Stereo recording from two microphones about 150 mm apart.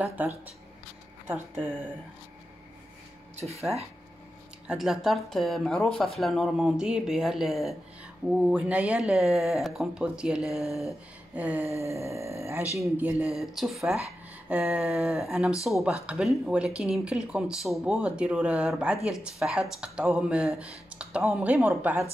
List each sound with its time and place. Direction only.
0.0 s speech: 10° right (ahead or behind)
3.3 s speech: 45° right (ahead or behind)
4.6 s speech: centre (ahead or behind)